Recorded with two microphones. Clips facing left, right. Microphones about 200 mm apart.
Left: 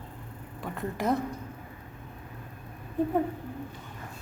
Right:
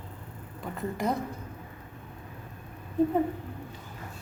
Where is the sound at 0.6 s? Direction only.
Centre (ahead or behind).